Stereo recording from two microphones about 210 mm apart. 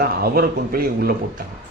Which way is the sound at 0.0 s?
45° right (ahead or behind).